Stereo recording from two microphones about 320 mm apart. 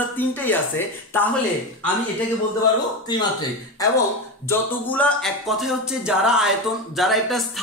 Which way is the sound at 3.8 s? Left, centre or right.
Centre.